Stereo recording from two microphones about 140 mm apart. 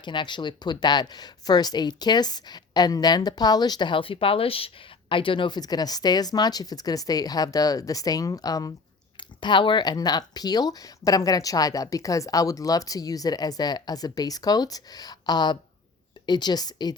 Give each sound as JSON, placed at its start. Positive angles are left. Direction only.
{"t": 0.0, "sound": "a woman's voice", "side_deg": 35}